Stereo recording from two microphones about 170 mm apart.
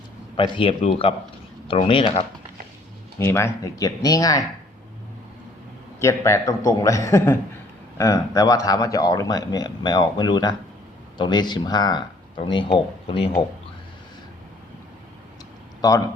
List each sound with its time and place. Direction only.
0.3 s speech: 30° left (ahead or behind)
3.2 s speech: 15° left (ahead or behind)
6.0 s a man's voice: 15° left (ahead or behind)
15.8 s speech: 20° left (ahead or behind)